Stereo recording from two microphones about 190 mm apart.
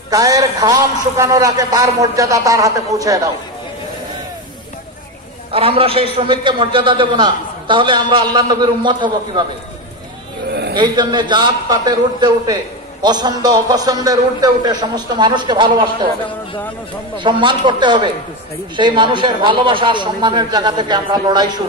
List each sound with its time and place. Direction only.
0.1 s a man's voice: 20° right (ahead or behind)
5.5 s a man's voice: 30° right (ahead or behind)
10.5 s a sound: 60° right (ahead or behind)
10.8 s a man's voice: 25° right (ahead or behind)
17.2 s a man's voice: 25° right (ahead or behind)